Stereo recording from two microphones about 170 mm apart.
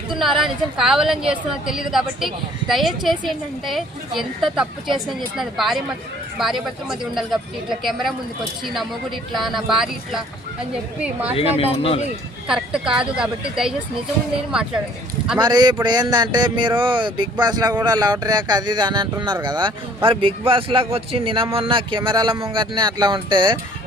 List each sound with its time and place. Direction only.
0.2 s a woman's voice: centre (ahead or behind)
11.5 s speech: 35° left (ahead or behind)
12.5 s a woman's voice: 5° right (ahead or behind)
15.4 s a man's voice: 25° right (ahead or behind)